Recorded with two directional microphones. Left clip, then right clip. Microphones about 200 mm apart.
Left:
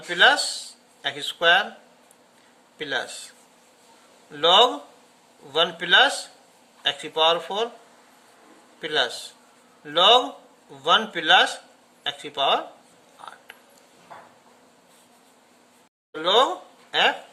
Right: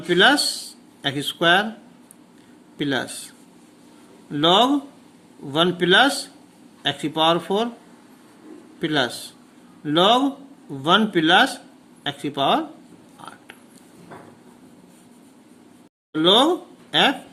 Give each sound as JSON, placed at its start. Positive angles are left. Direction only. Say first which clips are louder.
{"t": 0.1, "sound": "speech", "louder": "right 2 dB", "side_deg": -20}
{"t": 2.7, "sound": "speech", "louder": "right 3 dB", "side_deg": -20}
{"t": 8.8, "sound": "speech", "louder": "right 2 dB", "side_deg": -20}
{"t": 13.2, "sound": "a sound", "louder": "right 1 dB", "side_deg": -20}
{"t": 16.1, "sound": "speech", "louder": "right 3 dB", "side_deg": -25}